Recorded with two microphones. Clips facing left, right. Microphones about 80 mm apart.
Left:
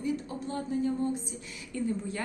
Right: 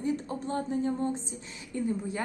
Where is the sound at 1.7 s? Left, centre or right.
Right.